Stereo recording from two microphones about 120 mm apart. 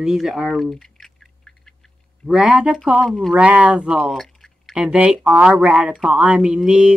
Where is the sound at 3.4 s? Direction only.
10° right (ahead or behind).